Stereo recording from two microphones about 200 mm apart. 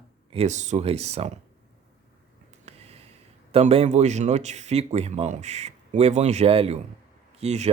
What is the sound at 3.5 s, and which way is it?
Speech, 30° right (ahead or behind).